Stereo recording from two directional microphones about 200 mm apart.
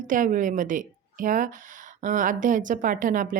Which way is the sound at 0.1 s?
40° right (ahead or behind).